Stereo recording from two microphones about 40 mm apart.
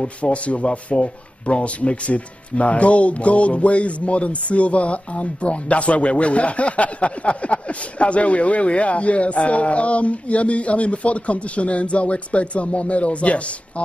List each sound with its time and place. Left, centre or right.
0.0 s speech: left